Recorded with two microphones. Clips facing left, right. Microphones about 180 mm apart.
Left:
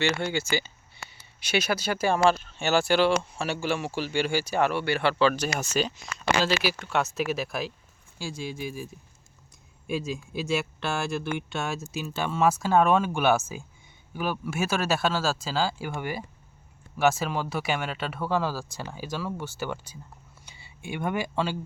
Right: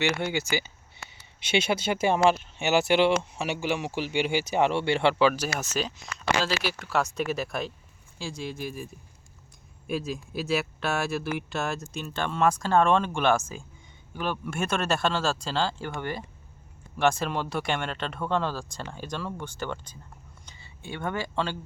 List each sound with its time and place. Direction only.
0.0 s speech: 15° right (ahead or behind)
5.5 s speech: centre (ahead or behind)